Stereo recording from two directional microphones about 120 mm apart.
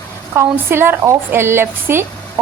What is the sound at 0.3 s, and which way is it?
A woman's voice, 20° right (ahead or behind).